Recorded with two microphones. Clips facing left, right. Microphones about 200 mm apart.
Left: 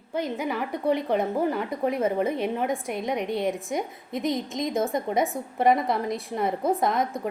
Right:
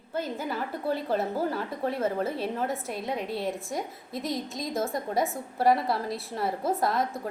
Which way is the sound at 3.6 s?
20° left (ahead or behind).